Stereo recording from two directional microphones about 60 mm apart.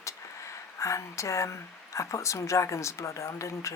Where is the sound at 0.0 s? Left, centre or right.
Left.